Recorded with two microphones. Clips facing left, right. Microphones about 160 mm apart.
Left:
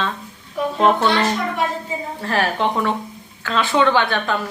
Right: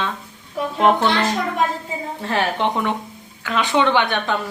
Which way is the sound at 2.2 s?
20° right (ahead or behind).